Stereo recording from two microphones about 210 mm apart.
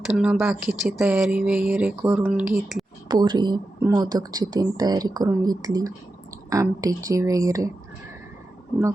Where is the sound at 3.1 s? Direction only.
20° right (ahead or behind).